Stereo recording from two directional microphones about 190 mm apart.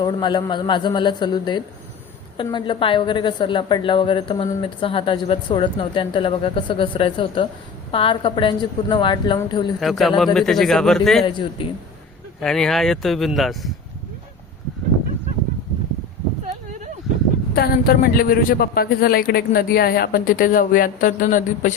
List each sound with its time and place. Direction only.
0.0 s a woman's voice: 25° left (ahead or behind)
9.8 s speech: centre (ahead or behind)
11.3 s a woman's voice: 25° left (ahead or behind)
12.4 s speech: 5° left (ahead or behind)
17.5 s a woman's voice: 55° left (ahead or behind)